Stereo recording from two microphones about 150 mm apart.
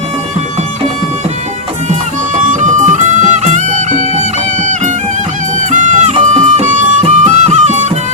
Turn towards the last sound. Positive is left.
turn(degrees=-50)  # may be behind; listen again after turning